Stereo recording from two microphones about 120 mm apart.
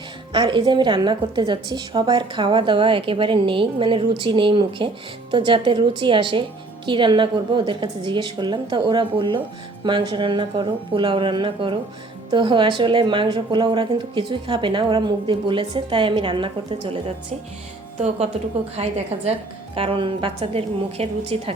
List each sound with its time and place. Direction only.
0.3 s a woman's voice: 40° right (ahead or behind)
18.8 s a woman's voice: 60° right (ahead or behind)
19.7 s speech: 50° right (ahead or behind)